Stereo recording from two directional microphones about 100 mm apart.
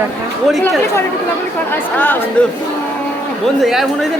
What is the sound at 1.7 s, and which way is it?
Speech, 20° left (ahead or behind).